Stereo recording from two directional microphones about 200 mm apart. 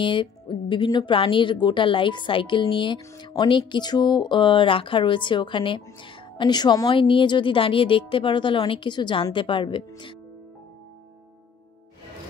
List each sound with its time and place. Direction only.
0.0 s speech: 25° left (ahead or behind)